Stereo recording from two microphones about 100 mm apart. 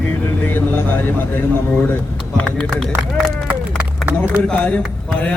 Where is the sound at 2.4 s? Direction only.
5° left (ahead or behind).